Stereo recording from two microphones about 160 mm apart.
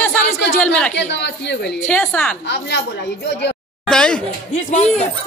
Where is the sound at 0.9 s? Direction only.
90° left.